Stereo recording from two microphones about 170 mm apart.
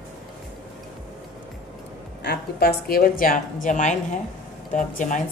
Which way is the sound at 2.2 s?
70° left (ahead or behind).